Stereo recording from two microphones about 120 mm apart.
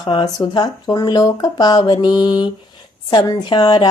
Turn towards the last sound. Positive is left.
turn(degrees=35)  # may be behind; listen again after turning